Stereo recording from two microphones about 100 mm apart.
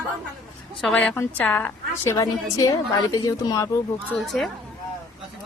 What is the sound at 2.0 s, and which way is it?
A woman's voice, 35° left (ahead or behind).